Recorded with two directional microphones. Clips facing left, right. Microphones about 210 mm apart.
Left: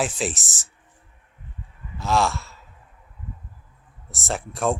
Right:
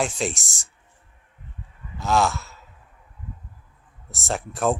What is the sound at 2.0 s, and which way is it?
Sigh, centre (ahead or behind).